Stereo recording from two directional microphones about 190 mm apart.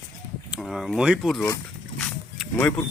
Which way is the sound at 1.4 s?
15° left (ahead or behind).